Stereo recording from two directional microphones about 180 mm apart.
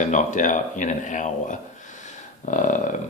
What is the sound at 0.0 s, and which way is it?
Speech, 45° left (ahead or behind).